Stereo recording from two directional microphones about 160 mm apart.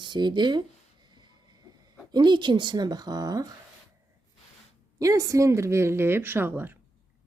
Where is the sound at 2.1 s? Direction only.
30° right (ahead or behind).